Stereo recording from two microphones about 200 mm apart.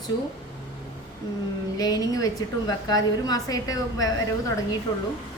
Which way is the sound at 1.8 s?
20° left (ahead or behind).